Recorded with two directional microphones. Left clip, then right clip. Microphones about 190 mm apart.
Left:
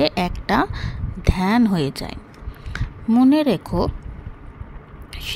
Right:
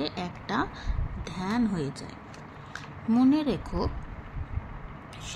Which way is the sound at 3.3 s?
35° left (ahead or behind).